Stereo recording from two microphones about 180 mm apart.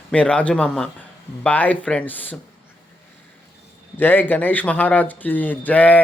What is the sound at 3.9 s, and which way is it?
Speech, 10° left (ahead or behind).